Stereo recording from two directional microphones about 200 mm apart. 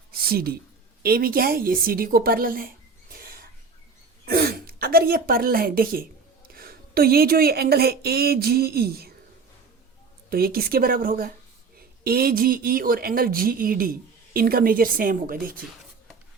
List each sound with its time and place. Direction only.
0.1 s a sound: 50° right (ahead or behind)
1.0 s a woman's voice: 50° right (ahead or behind)
10.2 s speech: 50° right (ahead or behind)